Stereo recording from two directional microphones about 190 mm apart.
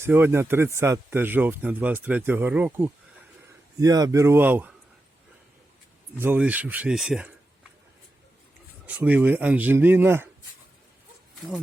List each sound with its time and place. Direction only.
0.0 s speech: 10° right (ahead or behind)
6.1 s speech: 10° right (ahead or behind)
8.9 s speech: 5° right (ahead or behind)